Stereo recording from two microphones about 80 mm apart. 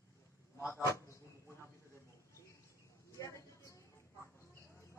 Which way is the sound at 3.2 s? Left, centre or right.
Left.